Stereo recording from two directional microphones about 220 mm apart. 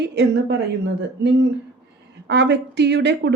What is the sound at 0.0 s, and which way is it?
Speech, 50° right (ahead or behind).